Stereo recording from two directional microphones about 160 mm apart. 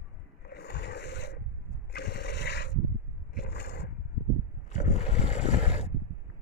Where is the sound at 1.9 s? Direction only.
90° left.